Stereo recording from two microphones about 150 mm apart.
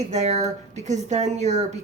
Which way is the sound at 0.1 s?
50° right (ahead or behind).